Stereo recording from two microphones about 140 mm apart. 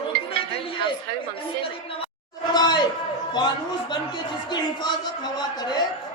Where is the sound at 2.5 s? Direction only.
30° left (ahead or behind).